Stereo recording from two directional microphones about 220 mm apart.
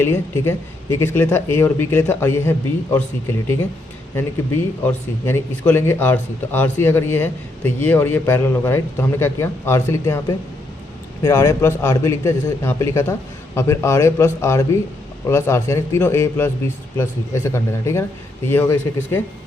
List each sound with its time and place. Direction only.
0.0 s speech: 10° left (ahead or behind)
4.1 s speech: 10° left (ahead or behind)